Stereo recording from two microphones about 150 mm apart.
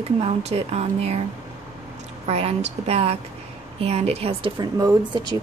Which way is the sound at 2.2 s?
45° right (ahead or behind).